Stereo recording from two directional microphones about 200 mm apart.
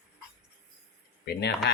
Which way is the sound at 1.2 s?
55° left (ahead or behind).